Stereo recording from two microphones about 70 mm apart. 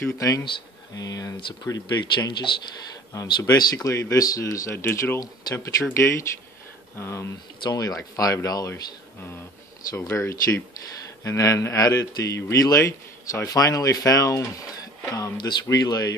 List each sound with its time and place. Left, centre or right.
0.2 s speech: left
3.7 s a man's voice: left
4.8 s speech: left
5.2 s speech: left
5.9 s a man's voice: left
7.6 s speech: left
9.9 s a man's voice: left
15.3 s speech: left